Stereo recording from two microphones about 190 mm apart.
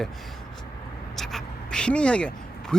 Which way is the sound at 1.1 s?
Centre (ahead or behind).